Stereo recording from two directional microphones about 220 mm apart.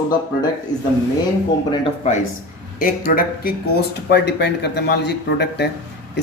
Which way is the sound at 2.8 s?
40° left (ahead or behind).